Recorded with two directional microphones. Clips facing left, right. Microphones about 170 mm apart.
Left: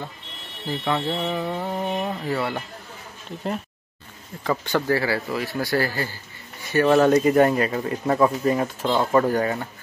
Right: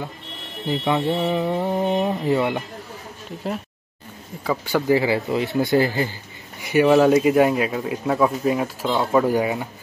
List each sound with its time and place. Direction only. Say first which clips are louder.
0.7 s speech: right 4 dB; 20° right (ahead or behind)
4.5 s speech: right 3 dB; 10° right (ahead or behind)
7.0 s speech: right 1 dB; centre (ahead or behind)